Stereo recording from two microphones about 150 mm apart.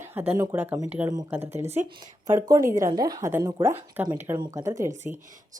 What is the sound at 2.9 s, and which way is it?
Speech, 25° right (ahead or behind).